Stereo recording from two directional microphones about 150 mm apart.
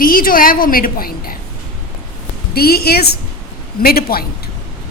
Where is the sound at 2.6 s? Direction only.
90° left.